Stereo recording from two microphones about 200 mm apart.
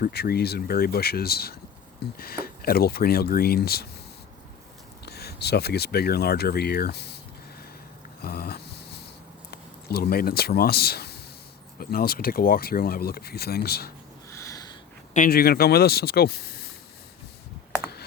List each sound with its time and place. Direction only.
0.0 s speech: 50° left (ahead or behind)
5.0 s speech: 55° left (ahead or behind)
8.2 s a sound: 50° left (ahead or behind)
9.5 s speech: 50° left (ahead or behind)
14.3 s a sound: 15° left (ahead or behind)
15.1 s speech: 45° left (ahead or behind)